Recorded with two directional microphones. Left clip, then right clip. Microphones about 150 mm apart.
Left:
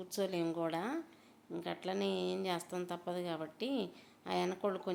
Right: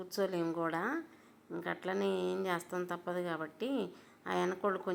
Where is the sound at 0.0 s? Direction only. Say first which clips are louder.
Right 2 dB; 25° left (ahead or behind).